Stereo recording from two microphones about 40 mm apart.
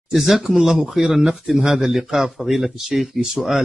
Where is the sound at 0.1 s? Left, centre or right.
Centre.